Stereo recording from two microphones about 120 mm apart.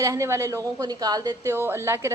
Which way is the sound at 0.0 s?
25° right (ahead or behind).